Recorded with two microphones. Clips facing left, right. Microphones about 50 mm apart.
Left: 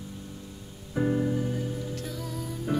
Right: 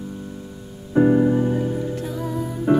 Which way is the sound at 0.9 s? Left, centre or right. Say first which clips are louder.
Right 11 dB; right.